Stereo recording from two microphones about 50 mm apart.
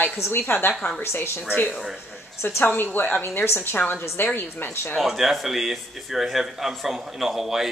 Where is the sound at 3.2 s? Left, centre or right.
Left.